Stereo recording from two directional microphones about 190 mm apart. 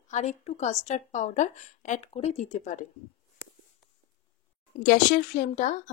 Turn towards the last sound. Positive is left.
turn(degrees=45)  # may be behind; listen again after turning